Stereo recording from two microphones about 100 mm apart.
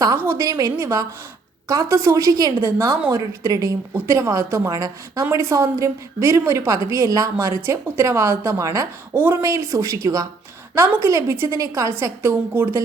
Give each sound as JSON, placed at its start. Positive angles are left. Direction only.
{"t": 0.2, "sound": "a woman's voice", "side_deg": -30}
{"t": 2.6, "sound": "a woman's voice", "side_deg": -25}
{"t": 9.1, "sound": "a woman's voice", "side_deg": -20}
{"t": 9.4, "sound": "a woman's voice", "side_deg": -30}